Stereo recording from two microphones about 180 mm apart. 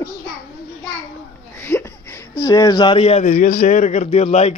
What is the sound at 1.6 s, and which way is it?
Speech, 10° left (ahead or behind).